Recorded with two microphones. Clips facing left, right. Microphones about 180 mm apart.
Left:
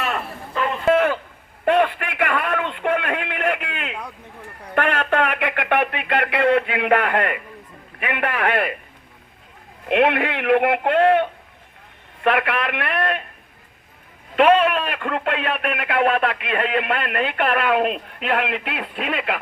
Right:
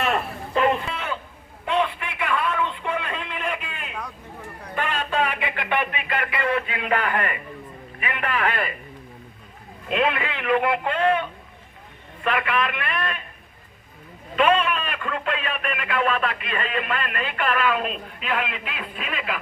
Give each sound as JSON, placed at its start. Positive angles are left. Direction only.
{"t": 0.9, "sound": "a sound", "side_deg": 65}
{"t": 4.7, "sound": "radio", "side_deg": 65}
{"t": 8.0, "sound": "speech", "side_deg": 65}
{"t": 9.9, "sound": "a man's voice", "side_deg": 65}
{"t": 14.3, "sound": "speech", "side_deg": 65}